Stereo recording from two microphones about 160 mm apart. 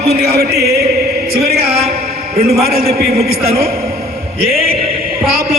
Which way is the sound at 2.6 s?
70° right (ahead or behind).